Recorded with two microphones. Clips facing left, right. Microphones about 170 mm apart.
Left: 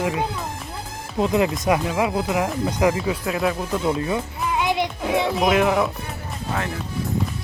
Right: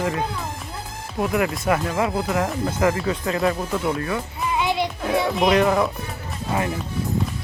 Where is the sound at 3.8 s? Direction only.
20° left (ahead or behind).